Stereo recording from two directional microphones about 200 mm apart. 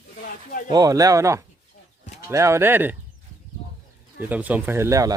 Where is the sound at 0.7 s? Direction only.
20° right (ahead or behind).